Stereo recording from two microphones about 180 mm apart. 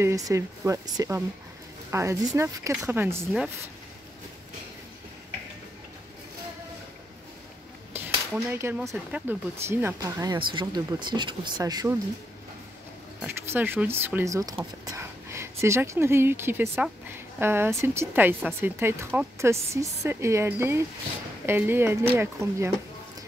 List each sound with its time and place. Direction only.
0.0 s speech: 15° right (ahead or behind)
8.5 s speech: 10° right (ahead or behind)
13.2 s speech: 10° right (ahead or behind)